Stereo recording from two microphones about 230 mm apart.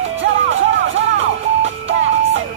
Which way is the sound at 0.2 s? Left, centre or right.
Right.